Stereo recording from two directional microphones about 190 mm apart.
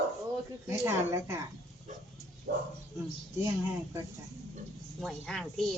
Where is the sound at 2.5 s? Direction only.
50° right (ahead or behind).